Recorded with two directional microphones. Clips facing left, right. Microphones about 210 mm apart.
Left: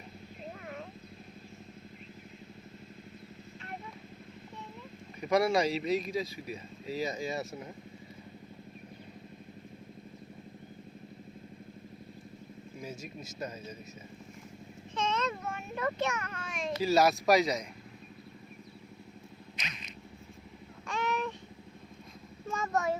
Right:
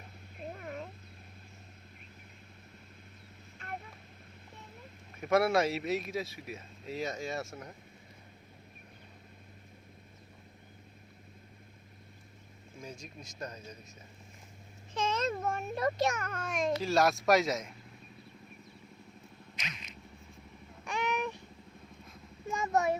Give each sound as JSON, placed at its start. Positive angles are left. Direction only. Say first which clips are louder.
{"t": 5.2, "sound": "speech", "louder": "even", "side_deg": -5}
{"t": 12.8, "sound": "speech", "louder": "left 3 dB", "side_deg": 5}
{"t": 14.9, "sound": "a child's voice", "louder": "right 1 dB", "side_deg": -45}
{"t": 16.8, "sound": "speech", "louder": "left 4 dB", "side_deg": 0}
{"t": 20.8, "sound": "a sound", "louder": "left 1 dB", "side_deg": -15}
{"t": 22.4, "sound": "a sound", "louder": "right 2 dB", "side_deg": -15}